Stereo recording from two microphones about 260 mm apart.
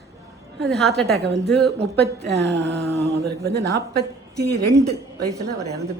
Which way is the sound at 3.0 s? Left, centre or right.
Centre.